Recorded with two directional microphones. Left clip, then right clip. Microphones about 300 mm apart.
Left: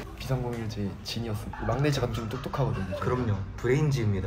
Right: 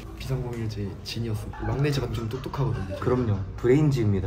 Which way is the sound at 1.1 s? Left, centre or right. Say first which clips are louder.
Right 1 dB; centre.